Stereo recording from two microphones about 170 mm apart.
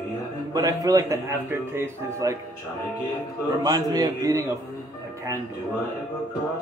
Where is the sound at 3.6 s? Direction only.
20° right (ahead or behind).